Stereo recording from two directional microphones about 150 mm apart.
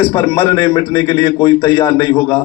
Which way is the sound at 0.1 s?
30° left (ahead or behind).